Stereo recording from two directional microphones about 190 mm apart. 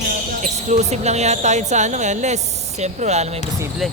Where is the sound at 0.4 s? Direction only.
35° right (ahead or behind).